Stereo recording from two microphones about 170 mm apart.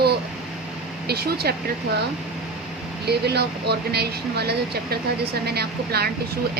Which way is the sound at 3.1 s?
75° right (ahead or behind).